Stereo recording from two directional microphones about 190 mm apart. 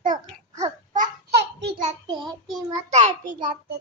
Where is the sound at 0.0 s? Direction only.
45° right (ahead or behind).